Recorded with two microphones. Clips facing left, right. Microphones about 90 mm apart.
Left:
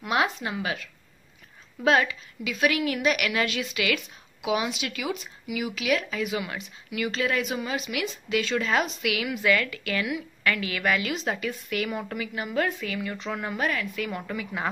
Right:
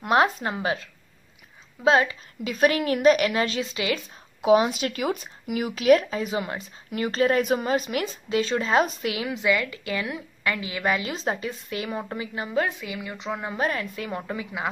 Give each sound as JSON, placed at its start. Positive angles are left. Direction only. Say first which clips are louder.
{"t": 0.0, "sound": "a woman's voice", "louder": "right 5 dB", "side_deg": -40}
{"t": 1.9, "sound": "a woman's voice", "louder": "right 2 dB", "side_deg": -25}
{"t": 2.4, "sound": "a woman's voice", "louder": "right 3 dB", "side_deg": -40}
{"t": 13.6, "sound": "a woman's voice", "louder": "right 2 dB", "side_deg": -35}